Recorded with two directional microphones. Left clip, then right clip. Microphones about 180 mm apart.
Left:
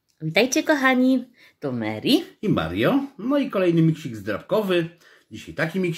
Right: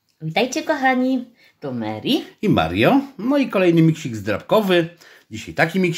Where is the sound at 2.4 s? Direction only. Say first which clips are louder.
Right 5 dB; 25° right (ahead or behind).